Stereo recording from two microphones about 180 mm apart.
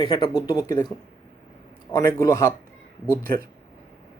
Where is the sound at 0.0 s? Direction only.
25° left (ahead or behind).